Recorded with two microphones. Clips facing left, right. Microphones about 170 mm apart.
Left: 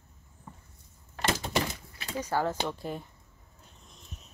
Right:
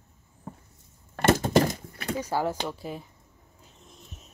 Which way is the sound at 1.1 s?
50° right (ahead or behind).